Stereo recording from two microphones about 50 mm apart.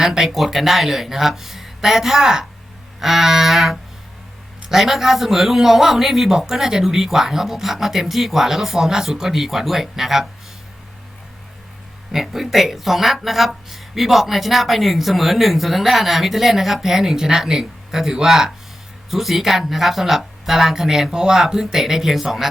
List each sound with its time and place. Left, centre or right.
0.0 s a woman's voice: centre
12.1 s a woman's voice: centre